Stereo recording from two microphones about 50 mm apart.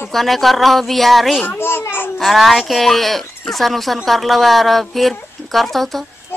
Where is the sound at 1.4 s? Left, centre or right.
Left.